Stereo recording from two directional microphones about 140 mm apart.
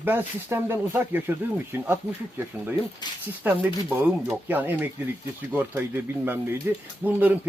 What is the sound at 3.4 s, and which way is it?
A man's voice, 15° right (ahead or behind).